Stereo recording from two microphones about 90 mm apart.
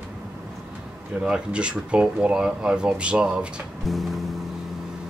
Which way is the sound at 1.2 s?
10° right (ahead or behind).